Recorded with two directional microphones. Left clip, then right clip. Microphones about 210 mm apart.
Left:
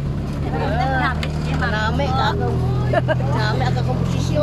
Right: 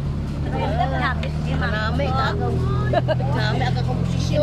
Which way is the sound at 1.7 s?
25° left (ahead or behind).